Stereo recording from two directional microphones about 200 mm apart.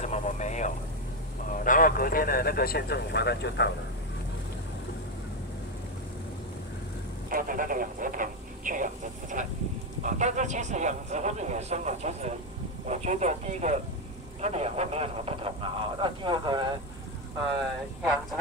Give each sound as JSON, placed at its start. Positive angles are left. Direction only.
{"t": 0.0, "sound": "vehicle", "side_deg": 35}
{"t": 1.5, "sound": "speech", "side_deg": 40}
{"t": 7.2, "sound": "speech", "side_deg": -45}